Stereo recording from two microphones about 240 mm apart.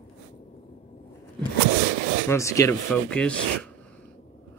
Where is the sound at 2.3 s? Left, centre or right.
Centre.